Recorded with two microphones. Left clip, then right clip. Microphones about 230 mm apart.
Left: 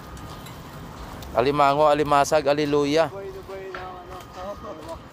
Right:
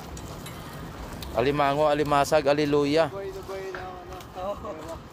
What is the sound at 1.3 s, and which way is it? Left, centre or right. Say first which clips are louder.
Speech: left 4 dB; left.